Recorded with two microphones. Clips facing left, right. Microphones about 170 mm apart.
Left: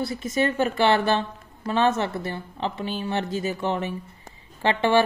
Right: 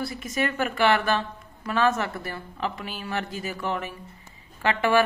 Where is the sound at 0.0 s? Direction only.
25° left (ahead or behind).